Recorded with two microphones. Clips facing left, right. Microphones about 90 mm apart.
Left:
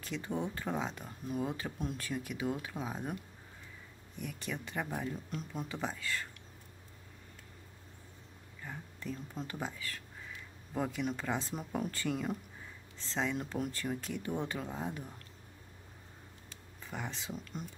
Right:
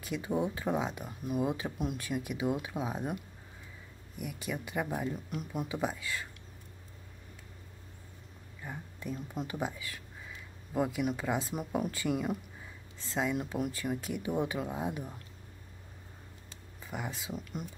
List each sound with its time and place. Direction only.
0.0 s speech: 10° right (ahead or behind)
4.2 s speech: 10° right (ahead or behind)
8.6 s speech: 15° right (ahead or behind)
16.8 s speech: 5° right (ahead or behind)